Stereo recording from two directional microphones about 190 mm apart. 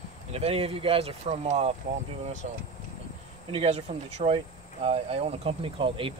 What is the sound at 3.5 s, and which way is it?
Speech, 30° right (ahead or behind).